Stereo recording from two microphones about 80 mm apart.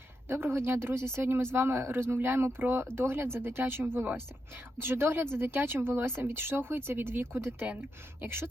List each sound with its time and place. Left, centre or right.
0.3 s speech: right